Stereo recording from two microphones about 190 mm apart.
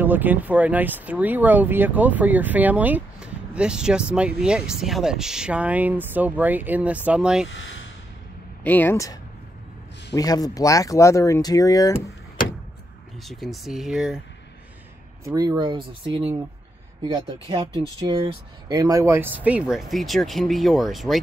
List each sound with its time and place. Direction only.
0.0 s speech: 10° right (ahead or behind)
7.4 s speech: 80° left
8.6 s speech: 10° left (ahead or behind)
13.2 s speech: centre (ahead or behind)
15.2 s speech: 20° right (ahead or behind); by 21.2 s centre (ahead or behind)